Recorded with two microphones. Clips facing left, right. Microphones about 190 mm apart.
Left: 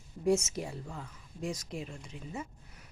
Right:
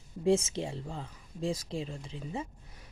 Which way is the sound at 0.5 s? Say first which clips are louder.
Right 3 dB; 25° right (ahead or behind).